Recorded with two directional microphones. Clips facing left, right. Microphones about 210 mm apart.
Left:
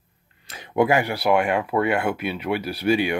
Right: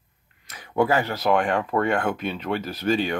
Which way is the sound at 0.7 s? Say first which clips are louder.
Left 2 dB; 15° left (ahead or behind).